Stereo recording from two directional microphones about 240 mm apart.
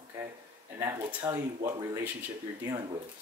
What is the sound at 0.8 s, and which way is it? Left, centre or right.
Speech, centre.